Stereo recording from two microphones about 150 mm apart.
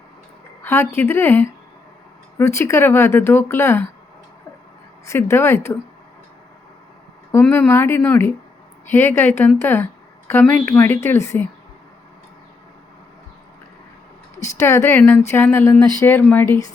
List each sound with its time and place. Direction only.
0.6 s speech: 15° left (ahead or behind)
5.0 s speech: 20° left (ahead or behind)
7.4 s speech: 5° left (ahead or behind)
7.7 s speech: 15° left (ahead or behind)
14.4 s speech: 20° left (ahead or behind)